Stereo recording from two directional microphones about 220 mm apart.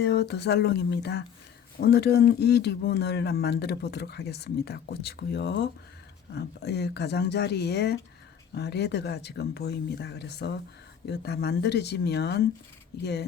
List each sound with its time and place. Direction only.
0.0 s speech: 50° left (ahead or behind)